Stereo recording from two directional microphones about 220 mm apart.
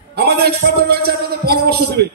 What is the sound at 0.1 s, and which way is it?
A man's voice, 50° right (ahead or behind).